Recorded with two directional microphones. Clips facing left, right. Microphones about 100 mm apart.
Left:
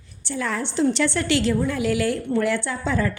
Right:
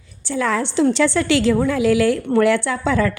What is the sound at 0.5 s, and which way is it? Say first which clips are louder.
Speech: right 4 dB; 90° right.